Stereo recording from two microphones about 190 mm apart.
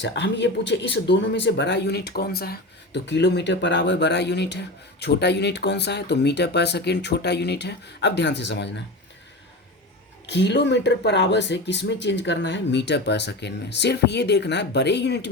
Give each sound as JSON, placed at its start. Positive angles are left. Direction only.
{"t": 0.0, "sound": "speech", "side_deg": 70}
{"t": 10.2, "sound": "speech", "side_deg": 65}